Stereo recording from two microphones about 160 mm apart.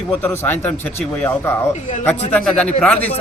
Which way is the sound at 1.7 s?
50° left (ahead or behind).